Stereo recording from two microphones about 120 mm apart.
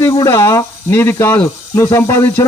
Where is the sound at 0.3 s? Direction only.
25° left (ahead or behind).